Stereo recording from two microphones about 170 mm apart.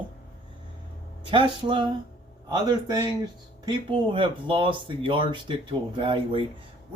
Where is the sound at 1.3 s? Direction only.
30° right (ahead or behind).